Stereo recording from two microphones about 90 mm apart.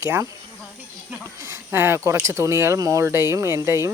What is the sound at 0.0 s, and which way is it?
Speech, 25° right (ahead or behind).